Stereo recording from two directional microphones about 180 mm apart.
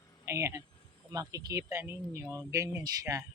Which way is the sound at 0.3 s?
15° right (ahead or behind).